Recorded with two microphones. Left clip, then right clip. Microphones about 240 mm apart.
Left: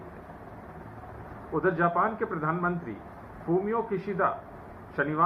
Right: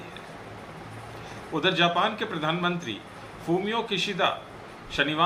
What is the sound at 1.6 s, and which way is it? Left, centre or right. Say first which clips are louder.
A man's voice: right 2 dB; right.